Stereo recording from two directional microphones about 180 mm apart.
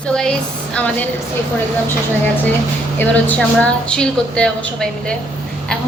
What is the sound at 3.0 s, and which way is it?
A woman's voice, 10° left (ahead or behind).